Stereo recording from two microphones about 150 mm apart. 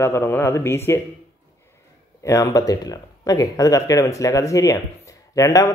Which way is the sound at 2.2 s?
20° left (ahead or behind).